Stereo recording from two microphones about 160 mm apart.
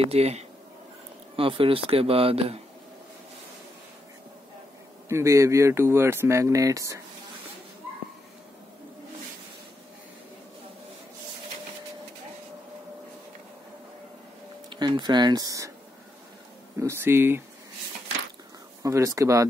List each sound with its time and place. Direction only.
0.0 s speech: 40° right (ahead or behind)
5.0 s speech: 20° right (ahead or behind)
14.7 s speech: 30° right (ahead or behind)
16.8 s speech: 15° right (ahead or behind)
18.8 s speech: 20° right (ahead or behind)